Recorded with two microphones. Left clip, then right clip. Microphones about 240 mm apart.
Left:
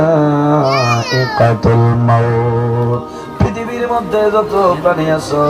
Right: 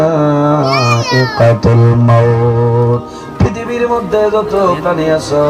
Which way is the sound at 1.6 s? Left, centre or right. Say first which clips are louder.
Right 1 dB; right.